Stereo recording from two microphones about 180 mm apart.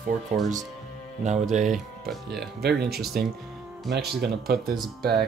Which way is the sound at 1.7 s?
Centre (ahead or behind).